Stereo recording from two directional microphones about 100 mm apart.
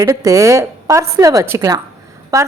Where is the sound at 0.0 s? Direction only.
35° right (ahead or behind).